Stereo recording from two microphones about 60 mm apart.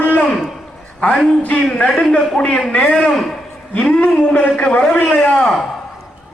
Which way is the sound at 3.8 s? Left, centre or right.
Left.